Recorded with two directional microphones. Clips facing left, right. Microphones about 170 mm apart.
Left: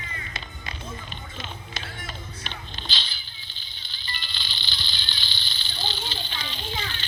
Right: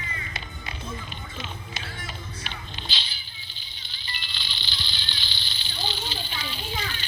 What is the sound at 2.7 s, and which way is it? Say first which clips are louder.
Whip: left 1 dB; 10° right (ahead or behind).